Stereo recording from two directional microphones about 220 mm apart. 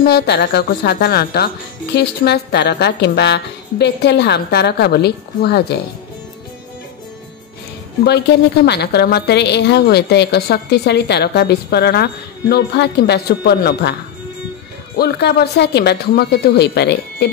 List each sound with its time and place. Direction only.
0.0 s speech: 50° left (ahead or behind)
8.6 s speech: 50° left (ahead or behind)
15.0 s speech: 45° left (ahead or behind)